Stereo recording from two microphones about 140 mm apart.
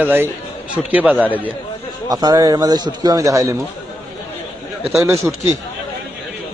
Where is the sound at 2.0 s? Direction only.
25° right (ahead or behind).